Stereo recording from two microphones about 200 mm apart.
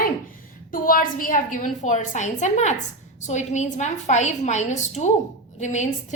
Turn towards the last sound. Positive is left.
turn(degrees=35)  # may be behind; listen again after turning